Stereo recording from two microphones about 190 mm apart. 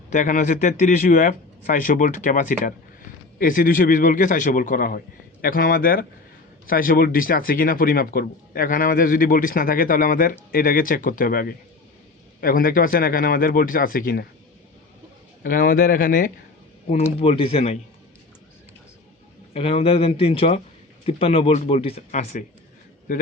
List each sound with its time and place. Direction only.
0.1 s a man's voice: 40° left (ahead or behind)
15.4 s a man's voice: 50° left (ahead or behind)
17.2 s speech: 30° left (ahead or behind)
19.5 s speech: 30° left (ahead or behind)